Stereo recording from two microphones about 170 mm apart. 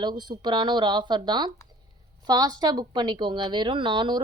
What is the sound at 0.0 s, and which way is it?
A woman's voice, 25° right (ahead or behind).